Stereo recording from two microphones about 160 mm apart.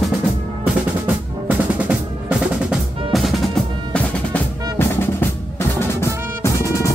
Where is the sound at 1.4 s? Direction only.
10° right (ahead or behind); by 5.2 s 15° left (ahead or behind).